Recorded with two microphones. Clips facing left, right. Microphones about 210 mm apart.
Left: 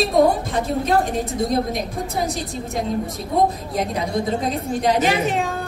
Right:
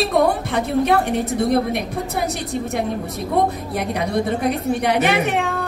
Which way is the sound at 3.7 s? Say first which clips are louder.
Right 1 dB; 65° right (ahead or behind).